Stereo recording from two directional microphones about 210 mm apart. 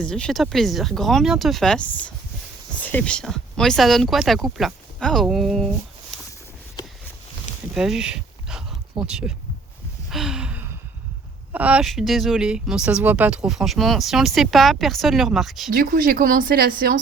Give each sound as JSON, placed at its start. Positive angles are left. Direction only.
{"t": 0.0, "sound": "speech", "side_deg": 5}
{"t": 6.1, "sound": "a sound", "side_deg": 0}
{"t": 7.7, "sound": "a sound", "side_deg": -5}
{"t": 9.0, "sound": "speech", "side_deg": -5}
{"t": 10.1, "sound": "gasp", "side_deg": 0}
{"t": 11.5, "sound": "speech", "side_deg": -5}
{"t": 15.7, "sound": "speech", "side_deg": -45}